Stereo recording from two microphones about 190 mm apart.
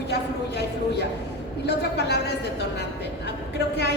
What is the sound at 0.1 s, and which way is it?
A woman's voice, 60° left (ahead or behind).